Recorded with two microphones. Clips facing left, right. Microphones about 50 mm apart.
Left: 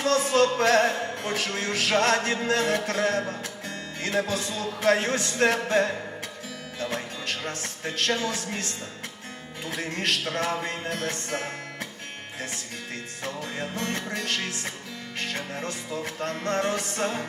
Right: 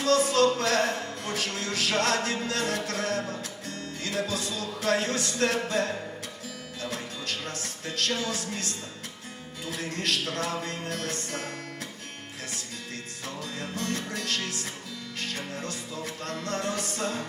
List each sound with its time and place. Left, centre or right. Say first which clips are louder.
0.0 s a sound: left 1 dB; left
0.6 s music: left 5 dB; left
13.2 s music: left 4 dB; left